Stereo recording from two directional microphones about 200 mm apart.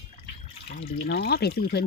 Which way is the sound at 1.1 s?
55° left (ahead or behind).